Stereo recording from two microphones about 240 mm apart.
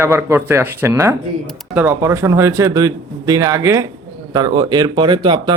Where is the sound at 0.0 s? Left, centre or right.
Centre.